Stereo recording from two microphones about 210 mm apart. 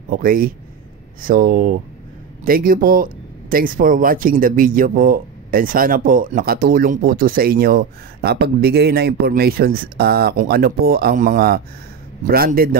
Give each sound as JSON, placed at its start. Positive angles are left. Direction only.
{"t": 0.2, "sound": "speech", "side_deg": -40}